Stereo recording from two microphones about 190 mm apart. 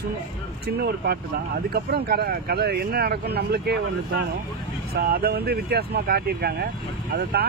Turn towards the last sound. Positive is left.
turn(degrees=-55)  # may be behind; listen again after turning